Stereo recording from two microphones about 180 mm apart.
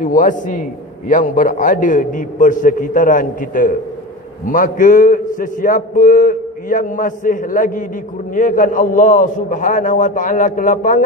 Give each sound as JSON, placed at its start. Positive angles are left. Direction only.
{"t": 0.0, "sound": "a man's voice", "side_deg": 45}